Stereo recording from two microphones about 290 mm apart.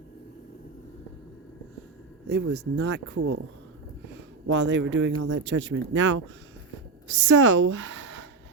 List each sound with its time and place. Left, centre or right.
2.2 s a woman's voice: right